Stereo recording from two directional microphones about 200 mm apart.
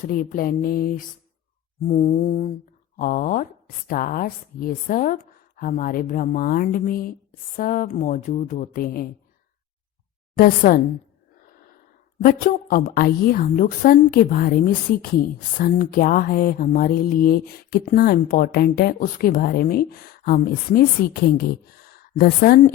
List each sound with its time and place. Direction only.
0.0 s speech: 40° left (ahead or behind)
1.9 s mantra: 40° left (ahead or behind)
3.0 s speech: 45° left (ahead or behind)
10.3 s speech: 45° left (ahead or behind)
12.2 s speech: 45° left (ahead or behind)